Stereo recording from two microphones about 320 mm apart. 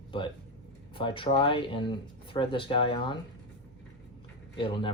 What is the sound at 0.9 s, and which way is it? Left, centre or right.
Speech, centre.